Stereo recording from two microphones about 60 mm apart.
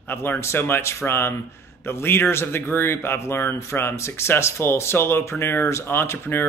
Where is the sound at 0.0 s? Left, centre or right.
Left.